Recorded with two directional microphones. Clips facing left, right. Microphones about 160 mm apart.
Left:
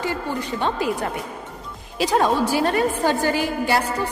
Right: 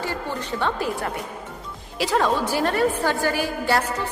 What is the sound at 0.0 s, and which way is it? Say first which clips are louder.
Speech: left 3 dB; 15° left (ahead or behind).